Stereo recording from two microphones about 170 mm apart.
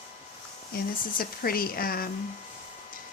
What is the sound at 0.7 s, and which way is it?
Speech, 60° left (ahead or behind).